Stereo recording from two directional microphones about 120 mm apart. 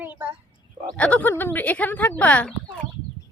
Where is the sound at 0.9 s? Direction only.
10° left (ahead or behind).